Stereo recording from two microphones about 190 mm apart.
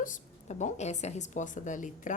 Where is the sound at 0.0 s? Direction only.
40° left (ahead or behind).